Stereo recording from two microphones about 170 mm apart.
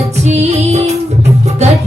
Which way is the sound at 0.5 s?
40° right (ahead or behind).